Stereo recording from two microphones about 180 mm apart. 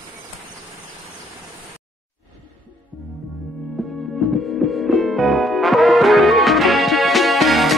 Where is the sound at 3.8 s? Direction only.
Centre (ahead or behind).